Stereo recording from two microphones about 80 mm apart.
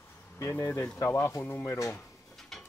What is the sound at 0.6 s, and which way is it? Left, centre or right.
Speech, left.